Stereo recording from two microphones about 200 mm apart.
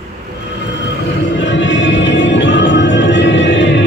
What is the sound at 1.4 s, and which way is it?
Music, 65° left (ahead or behind).